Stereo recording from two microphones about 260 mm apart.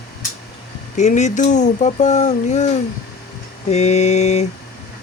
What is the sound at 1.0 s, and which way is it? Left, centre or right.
Speech, left.